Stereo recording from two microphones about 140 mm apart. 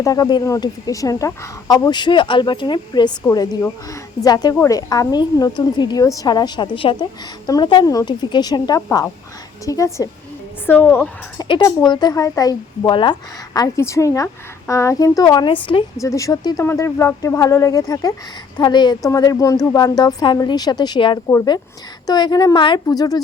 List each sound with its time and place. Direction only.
0.0 s a woman's voice: 25° left (ahead or behind)
11.3 s a woman's voice: 35° left (ahead or behind)
21.2 s a woman's voice: 20° left (ahead or behind)